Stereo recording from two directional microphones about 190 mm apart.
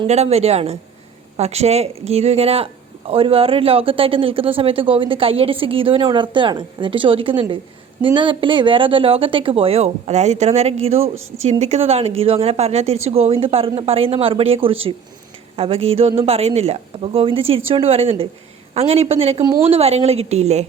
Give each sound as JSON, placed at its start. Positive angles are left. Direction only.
{"t": 0.1, "sound": "speech", "side_deg": -35}